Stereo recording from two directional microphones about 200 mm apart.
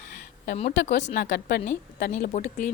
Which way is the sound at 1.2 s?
55° left (ahead or behind).